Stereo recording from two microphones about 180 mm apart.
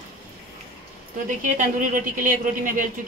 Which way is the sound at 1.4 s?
45° right (ahead or behind).